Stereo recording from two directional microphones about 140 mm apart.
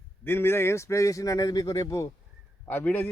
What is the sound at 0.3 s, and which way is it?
Speech, 15° left (ahead or behind).